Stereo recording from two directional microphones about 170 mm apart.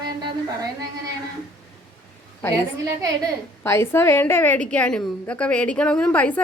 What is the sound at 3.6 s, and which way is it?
A woman's voice, 15° left (ahead or behind).